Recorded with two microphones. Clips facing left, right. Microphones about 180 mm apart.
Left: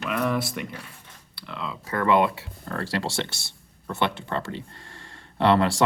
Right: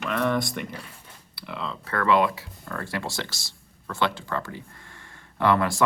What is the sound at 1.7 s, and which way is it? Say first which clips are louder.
Speech: left 1 dB; 15° left (ahead or behind).